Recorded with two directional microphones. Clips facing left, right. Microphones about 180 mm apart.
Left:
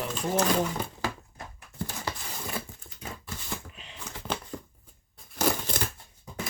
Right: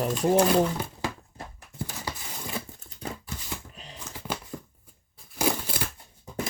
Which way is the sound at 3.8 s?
40° right (ahead or behind).